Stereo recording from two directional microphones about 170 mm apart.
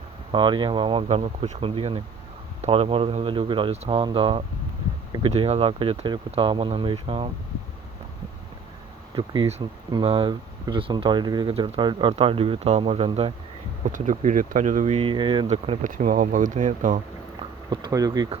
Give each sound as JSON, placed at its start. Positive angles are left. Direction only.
{"t": 0.3, "sound": "speech", "side_deg": -30}
{"t": 9.1, "sound": "speech", "side_deg": -30}
{"t": 13.8, "sound": "speech", "side_deg": -50}
{"t": 14.9, "sound": "speech", "side_deg": -30}
{"t": 15.9, "sound": "speech", "side_deg": -55}
{"t": 17.7, "sound": "speech", "side_deg": -20}